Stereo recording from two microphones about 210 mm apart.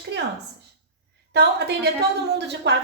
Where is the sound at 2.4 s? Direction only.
55° right (ahead or behind).